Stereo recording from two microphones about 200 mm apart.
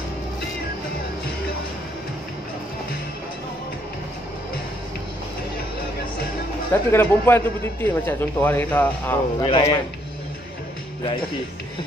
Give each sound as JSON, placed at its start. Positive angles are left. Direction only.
{"t": 6.7, "sound": "a man's voice", "side_deg": 10}